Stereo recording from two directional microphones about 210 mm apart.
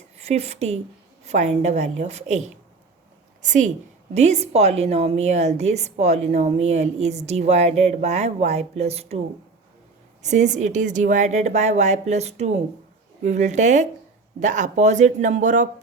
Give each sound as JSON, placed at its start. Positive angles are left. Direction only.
{"t": 0.2, "sound": "a woman's voice", "side_deg": -30}
{"t": 10.2, "sound": "a woman's voice", "side_deg": -35}